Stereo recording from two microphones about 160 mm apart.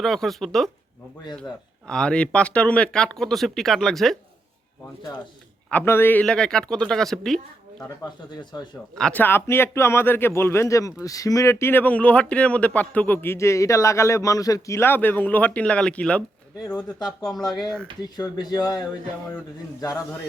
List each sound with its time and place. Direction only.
0.0 s speech: centre (ahead or behind)
1.9 s speech: 5° left (ahead or behind)
5.7 s speech: 15° left (ahead or behind)
8.5 s speech: 25° left (ahead or behind)
9.0 s speech: 10° left (ahead or behind)
18.0 s speech: 25° left (ahead or behind)